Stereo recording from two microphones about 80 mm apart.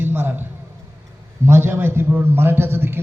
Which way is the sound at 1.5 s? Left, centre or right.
Right.